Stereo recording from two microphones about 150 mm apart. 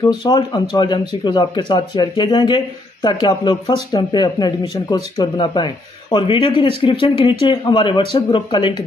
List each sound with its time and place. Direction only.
0.0 s speech: 30° left (ahead or behind)